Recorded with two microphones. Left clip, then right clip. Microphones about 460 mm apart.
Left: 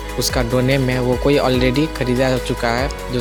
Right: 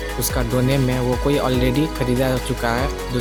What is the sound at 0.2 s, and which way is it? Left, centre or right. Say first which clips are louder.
Speech: left 5 dB; right.